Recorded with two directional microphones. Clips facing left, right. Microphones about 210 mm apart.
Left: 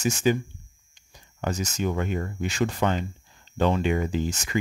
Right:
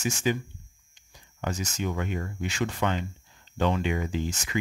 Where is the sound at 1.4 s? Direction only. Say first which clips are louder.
Left 4 dB; 40° left (ahead or behind).